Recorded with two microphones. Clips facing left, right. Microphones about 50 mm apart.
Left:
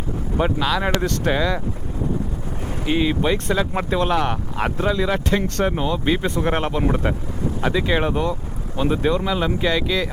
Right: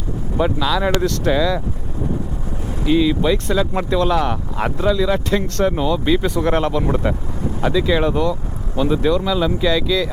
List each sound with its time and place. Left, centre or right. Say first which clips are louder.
0.3 s speech: right 2 dB; centre
1.3 s speech: right 3 dB; left
2.8 s speech: right 4 dB; left
3.3 s speech: right 2 dB; centre
7.7 s speech: right 4 dB; left